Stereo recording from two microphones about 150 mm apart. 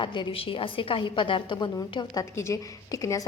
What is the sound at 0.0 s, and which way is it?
A woman's voice, 35° left (ahead or behind).